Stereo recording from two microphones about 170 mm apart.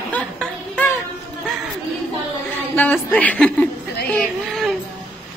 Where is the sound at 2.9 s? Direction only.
10° left (ahead or behind).